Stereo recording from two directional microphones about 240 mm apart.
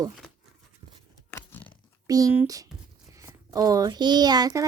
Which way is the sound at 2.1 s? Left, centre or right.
Centre.